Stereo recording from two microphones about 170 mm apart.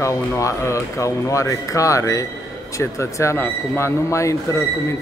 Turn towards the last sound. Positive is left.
turn(degrees=20)  # may be behind; listen again after turning